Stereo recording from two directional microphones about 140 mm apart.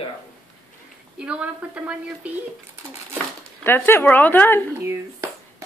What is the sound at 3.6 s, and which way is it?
Speech, 15° left (ahead or behind).